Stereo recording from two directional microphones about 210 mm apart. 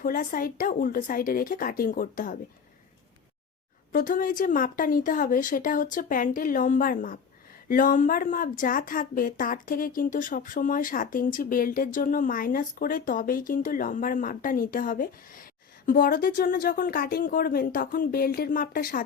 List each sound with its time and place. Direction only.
0.0 s speech: 40° left (ahead or behind)
3.9 s speech: 40° left (ahead or behind)